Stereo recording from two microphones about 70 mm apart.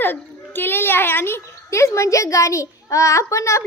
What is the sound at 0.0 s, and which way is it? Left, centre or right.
A child's voice, left.